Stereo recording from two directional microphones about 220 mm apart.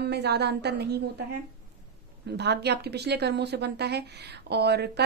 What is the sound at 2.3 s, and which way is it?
Speech, 50° right (ahead or behind).